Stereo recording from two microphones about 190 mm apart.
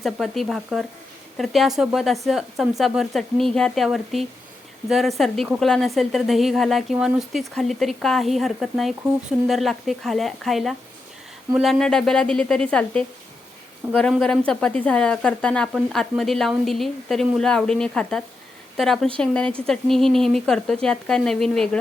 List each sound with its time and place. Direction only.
0.0 s speech: centre (ahead or behind)